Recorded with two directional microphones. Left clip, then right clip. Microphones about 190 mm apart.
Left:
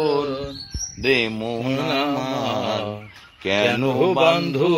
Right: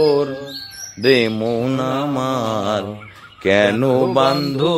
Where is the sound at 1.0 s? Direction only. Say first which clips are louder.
Right 5 dB; 50° right (ahead or behind).